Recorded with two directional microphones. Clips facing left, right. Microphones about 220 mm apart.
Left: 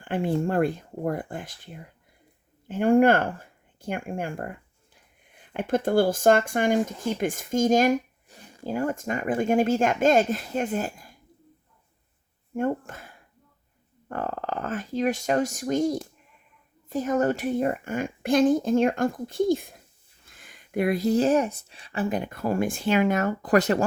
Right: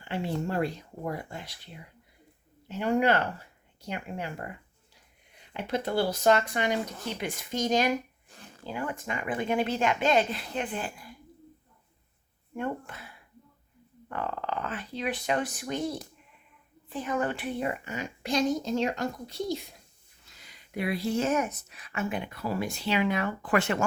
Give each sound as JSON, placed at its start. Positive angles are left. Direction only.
{"t": 0.0, "sound": "speech", "side_deg": 50}
{"t": 8.3, "sound": "a sound", "side_deg": 10}
{"t": 8.6, "sound": "speech", "side_deg": 45}
{"t": 12.5, "sound": "speech", "side_deg": 45}